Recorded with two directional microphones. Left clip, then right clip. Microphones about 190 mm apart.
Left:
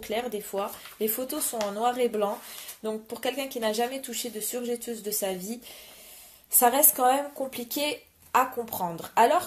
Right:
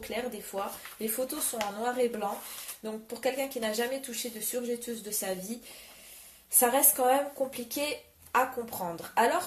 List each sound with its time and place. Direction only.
0.0 s speech: 45° left (ahead or behind)
6.5 s speech: 45° left (ahead or behind)